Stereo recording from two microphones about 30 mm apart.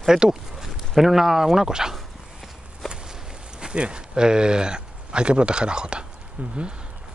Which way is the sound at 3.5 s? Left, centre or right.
Right.